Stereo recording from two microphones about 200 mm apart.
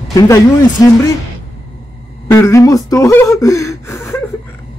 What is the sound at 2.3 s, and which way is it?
Speech, 15° left (ahead or behind).